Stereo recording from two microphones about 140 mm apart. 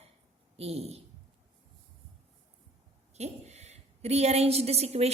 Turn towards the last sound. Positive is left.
turn(degrees=-45)  # may be behind; listen again after turning